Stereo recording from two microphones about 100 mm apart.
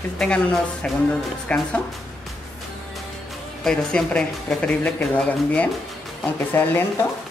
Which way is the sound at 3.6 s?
10° left (ahead or behind).